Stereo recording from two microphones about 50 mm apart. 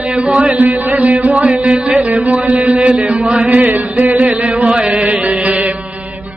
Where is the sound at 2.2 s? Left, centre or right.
Right.